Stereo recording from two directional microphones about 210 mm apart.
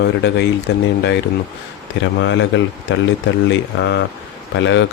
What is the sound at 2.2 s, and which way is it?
Speech, 60° left (ahead or behind).